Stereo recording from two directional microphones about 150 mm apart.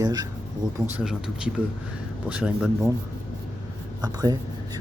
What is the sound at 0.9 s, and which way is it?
Speech, 5° right (ahead or behind).